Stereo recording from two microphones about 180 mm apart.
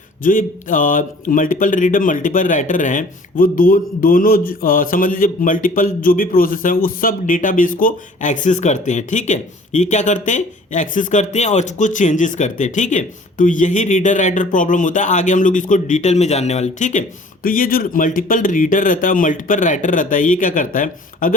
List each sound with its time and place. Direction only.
0.2 s speech: 50° left (ahead or behind)